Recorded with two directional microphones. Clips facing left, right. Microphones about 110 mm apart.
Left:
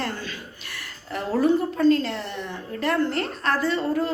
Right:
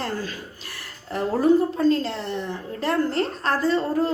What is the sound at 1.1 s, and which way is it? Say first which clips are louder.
A woman's voice: right 2 dB; 30° right (ahead or behind).